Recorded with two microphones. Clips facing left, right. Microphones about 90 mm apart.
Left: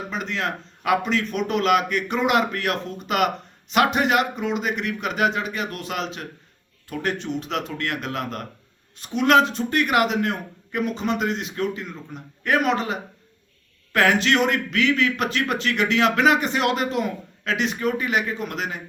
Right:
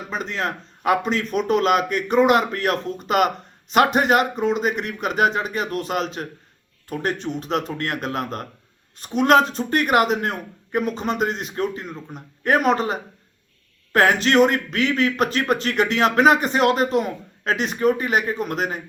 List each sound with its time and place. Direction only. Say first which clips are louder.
0.1 s a man's voice: right 3 dB; 40° right (ahead or behind)